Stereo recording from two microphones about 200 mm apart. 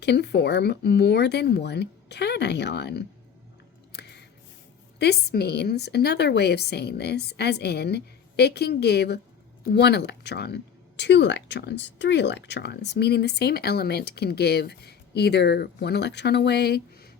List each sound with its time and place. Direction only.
0.0 s speech: 60° left (ahead or behind)
3.9 s a sound: 55° left (ahead or behind)
4.9 s speech: 55° left (ahead or behind)